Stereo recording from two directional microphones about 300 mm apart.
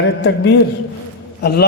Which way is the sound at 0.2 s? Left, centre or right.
Left.